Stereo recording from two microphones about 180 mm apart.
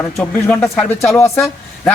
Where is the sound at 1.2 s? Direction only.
15° left (ahead or behind).